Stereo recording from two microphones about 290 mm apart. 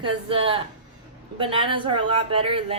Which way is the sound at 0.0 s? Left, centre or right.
Centre.